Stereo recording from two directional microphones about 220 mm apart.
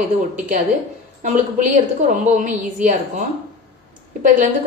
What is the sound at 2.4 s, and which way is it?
Speech, 35° right (ahead or behind).